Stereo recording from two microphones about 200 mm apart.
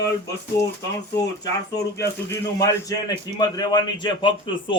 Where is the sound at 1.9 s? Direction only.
15° left (ahead or behind).